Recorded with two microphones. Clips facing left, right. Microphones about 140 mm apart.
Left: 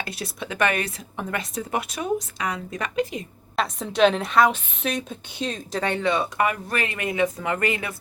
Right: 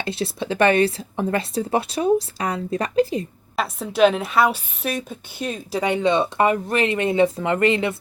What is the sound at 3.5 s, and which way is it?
A woman's voice, 5° right (ahead or behind).